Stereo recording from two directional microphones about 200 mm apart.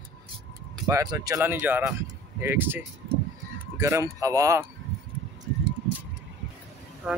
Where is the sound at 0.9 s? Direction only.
15° right (ahead or behind).